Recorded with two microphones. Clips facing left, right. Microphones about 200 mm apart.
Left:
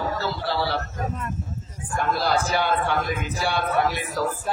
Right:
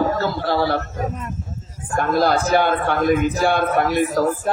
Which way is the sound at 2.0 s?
50° right (ahead or behind).